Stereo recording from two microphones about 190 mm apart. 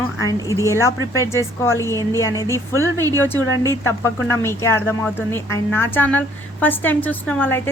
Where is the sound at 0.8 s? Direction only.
15° left (ahead or behind).